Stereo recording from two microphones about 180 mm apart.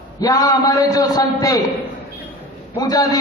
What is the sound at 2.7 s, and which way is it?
Speech, 20° left (ahead or behind).